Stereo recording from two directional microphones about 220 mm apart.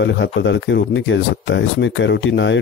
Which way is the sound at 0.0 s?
55° left (ahead or behind).